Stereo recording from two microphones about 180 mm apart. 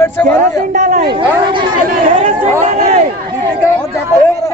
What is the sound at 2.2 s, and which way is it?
Speech, 45° right (ahead or behind).